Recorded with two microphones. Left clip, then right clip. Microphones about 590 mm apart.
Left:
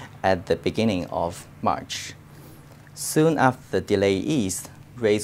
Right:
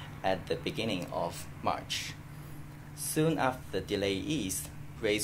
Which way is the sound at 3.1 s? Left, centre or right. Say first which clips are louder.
Left 10 dB; left.